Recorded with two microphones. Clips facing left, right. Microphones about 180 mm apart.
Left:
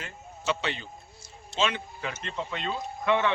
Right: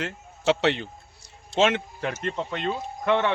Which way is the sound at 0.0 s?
75° right (ahead or behind).